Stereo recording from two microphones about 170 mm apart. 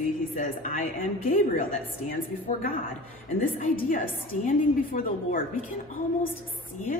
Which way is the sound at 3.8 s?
55° left (ahead or behind).